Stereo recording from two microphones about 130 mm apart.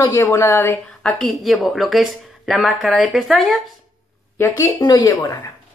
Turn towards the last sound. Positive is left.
turn(degrees=25)  # may be behind; listen again after turning